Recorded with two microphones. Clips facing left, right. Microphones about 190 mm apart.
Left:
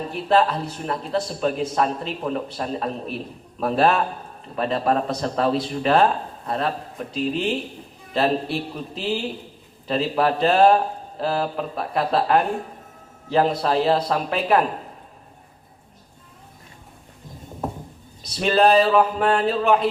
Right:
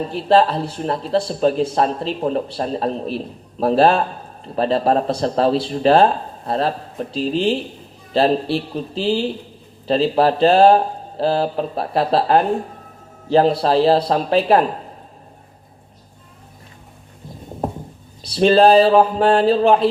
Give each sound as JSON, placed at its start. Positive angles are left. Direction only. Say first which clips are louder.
{"t": 0.1, "sound": "speech", "louder": "right 4 dB", "side_deg": -30}
{"t": 18.2, "sound": "speech", "louder": "right 6 dB", "side_deg": -30}